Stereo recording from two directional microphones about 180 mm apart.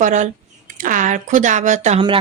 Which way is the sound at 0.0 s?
45° right (ahead or behind).